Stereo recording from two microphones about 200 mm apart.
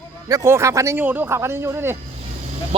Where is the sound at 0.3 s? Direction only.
15° right (ahead or behind).